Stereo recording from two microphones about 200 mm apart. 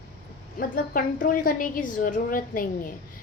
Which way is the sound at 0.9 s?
45° left (ahead or behind).